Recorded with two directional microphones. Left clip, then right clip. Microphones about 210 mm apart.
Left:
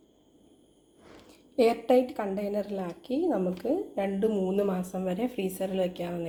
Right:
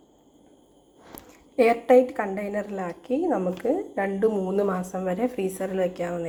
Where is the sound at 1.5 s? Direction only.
5° left (ahead or behind).